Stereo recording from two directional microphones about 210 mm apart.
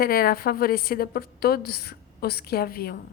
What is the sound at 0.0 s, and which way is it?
A woman's voice, 45° left (ahead or behind).